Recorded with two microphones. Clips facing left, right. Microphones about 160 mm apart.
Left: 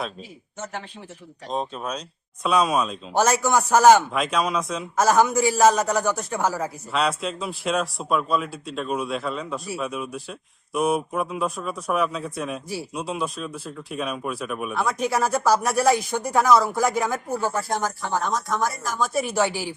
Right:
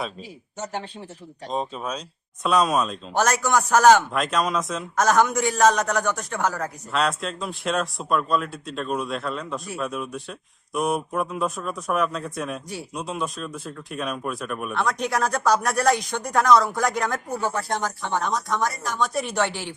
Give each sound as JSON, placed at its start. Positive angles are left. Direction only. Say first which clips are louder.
{"t": 0.6, "sound": "speech", "louder": "right 3 dB", "side_deg": -35}
{"t": 1.5, "sound": "a man's voice", "louder": "even", "side_deg": 0}